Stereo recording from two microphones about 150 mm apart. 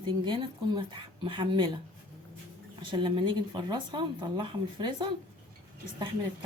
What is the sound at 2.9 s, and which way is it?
Speech, 30° right (ahead or behind).